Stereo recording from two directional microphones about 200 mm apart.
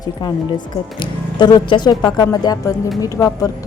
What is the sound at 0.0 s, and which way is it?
A woman's voice, 20° left (ahead or behind).